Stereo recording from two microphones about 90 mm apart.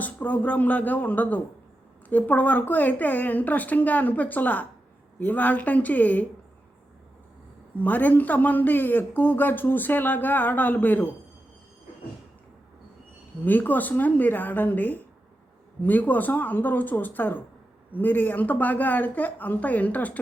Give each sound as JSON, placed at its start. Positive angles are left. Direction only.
{"t": 0.0, "sound": "a man's voice", "side_deg": 20}
{"t": 7.8, "sound": "a man's voice", "side_deg": 20}
{"t": 13.4, "sound": "a man's voice", "side_deg": 20}